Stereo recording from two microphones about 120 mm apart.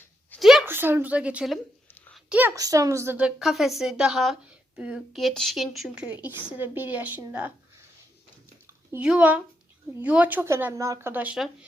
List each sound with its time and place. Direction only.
0.3 s a sound: 5° right (ahead or behind)
0.6 s a woman's voice: 15° right (ahead or behind)
2.6 s a child's voice: 30° right (ahead or behind)
3.2 s a woman's voice: 10° right (ahead or behind)
9.0 s speech: 10° right (ahead or behind)